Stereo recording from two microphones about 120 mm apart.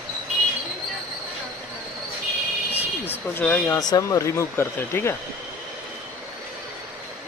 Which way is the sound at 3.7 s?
30° left (ahead or behind).